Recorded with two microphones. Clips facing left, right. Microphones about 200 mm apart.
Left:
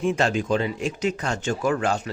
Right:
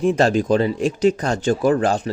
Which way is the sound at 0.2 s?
35° right (ahead or behind).